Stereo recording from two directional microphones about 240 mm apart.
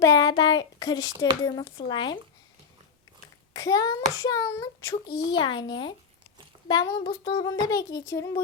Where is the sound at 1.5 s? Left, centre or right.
Centre.